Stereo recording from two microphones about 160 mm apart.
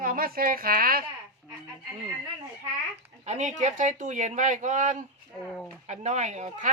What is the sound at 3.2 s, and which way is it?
Speech, 45° right (ahead or behind).